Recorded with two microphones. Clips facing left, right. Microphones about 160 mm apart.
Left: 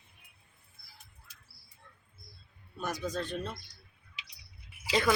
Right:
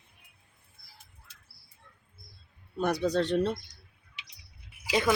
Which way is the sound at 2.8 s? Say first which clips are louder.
Right 8 dB; 70° right (ahead or behind).